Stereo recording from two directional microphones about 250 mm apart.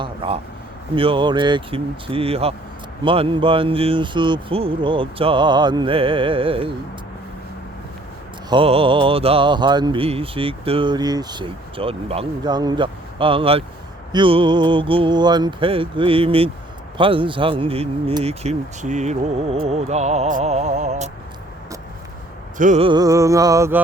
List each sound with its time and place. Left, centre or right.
0.0 s a sound: right
0.9 s speech: centre
8.4 s speech: right
22.5 s mantra: right; by 23.8 s centre